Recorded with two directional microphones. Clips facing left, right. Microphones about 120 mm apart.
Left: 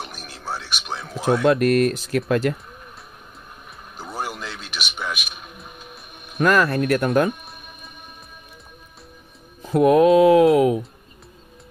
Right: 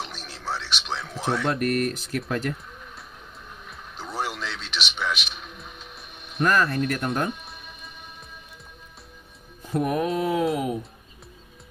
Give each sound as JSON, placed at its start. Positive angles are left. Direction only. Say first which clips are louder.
{"t": 0.3, "sound": "music", "louder": "left 1 dB", "side_deg": 10}
{"t": 1.0, "sound": "speech", "louder": "left 9 dB", "side_deg": 10}
{"t": 1.3, "sound": "speech", "louder": "left 8 dB", "side_deg": 80}
{"t": 4.0, "sound": "a sound", "louder": "even", "side_deg": 10}
{"t": 4.7, "sound": "a man's voice", "louder": "right 1 dB", "side_deg": 10}
{"t": 5.2, "sound": "music", "louder": "even", "side_deg": 10}
{"t": 6.4, "sound": "speech", "louder": "left 4 dB", "side_deg": 85}
{"t": 9.6, "sound": "speech", "louder": "left 10 dB", "side_deg": 90}